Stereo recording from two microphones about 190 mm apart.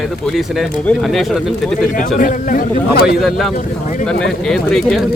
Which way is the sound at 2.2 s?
45° left (ahead or behind).